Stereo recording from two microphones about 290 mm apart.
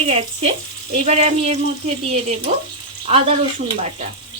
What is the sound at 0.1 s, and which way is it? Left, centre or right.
Dishes, centre.